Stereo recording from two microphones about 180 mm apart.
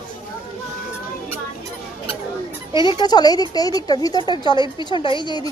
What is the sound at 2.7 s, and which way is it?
A woman's voice, 25° left (ahead or behind).